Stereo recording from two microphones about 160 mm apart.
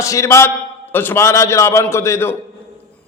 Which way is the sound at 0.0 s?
20° left (ahead or behind).